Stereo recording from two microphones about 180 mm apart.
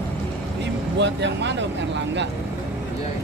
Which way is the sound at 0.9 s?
75° right (ahead or behind).